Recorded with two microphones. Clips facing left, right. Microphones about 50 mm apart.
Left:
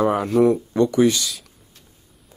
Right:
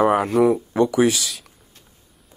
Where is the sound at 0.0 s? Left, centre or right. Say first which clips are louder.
Right 2 dB; right.